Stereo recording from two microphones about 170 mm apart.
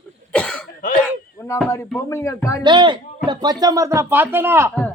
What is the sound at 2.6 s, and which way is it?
Speech, 25° right (ahead or behind).